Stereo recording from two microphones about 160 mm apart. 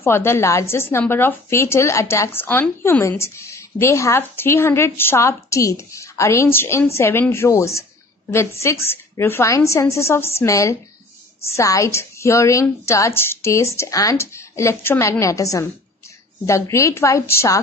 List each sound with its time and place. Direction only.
0.0 s a woman's voice: 15° left (ahead or behind)